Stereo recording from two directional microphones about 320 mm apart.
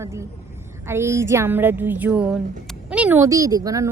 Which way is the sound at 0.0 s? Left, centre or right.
Centre.